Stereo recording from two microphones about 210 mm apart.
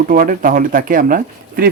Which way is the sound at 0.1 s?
40° right (ahead or behind).